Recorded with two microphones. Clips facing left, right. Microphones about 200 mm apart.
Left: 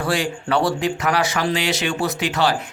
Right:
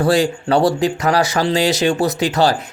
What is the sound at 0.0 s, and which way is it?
Speech, 40° right (ahead or behind).